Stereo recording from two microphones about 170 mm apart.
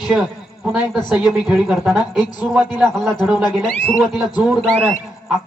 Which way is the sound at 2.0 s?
25° left (ahead or behind).